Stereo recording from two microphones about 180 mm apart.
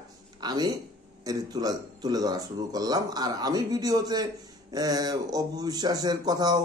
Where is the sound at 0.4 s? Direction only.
25° right (ahead or behind).